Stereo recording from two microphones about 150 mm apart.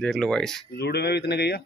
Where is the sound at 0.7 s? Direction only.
90° left.